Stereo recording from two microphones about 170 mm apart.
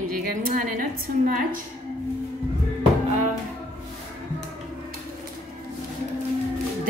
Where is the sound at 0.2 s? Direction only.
55° right (ahead or behind).